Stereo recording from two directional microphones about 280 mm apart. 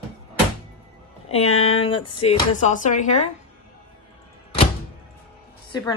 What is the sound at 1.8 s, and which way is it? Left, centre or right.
A woman's voice, centre.